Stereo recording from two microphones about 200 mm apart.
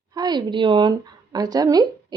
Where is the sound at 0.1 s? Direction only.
20° right (ahead or behind).